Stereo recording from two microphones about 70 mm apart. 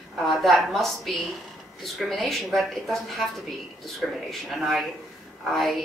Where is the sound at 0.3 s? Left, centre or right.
Centre.